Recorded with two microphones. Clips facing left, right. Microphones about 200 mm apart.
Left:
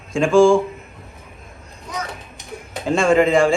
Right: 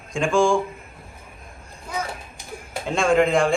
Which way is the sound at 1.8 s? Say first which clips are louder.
Even; 5° right (ahead or behind).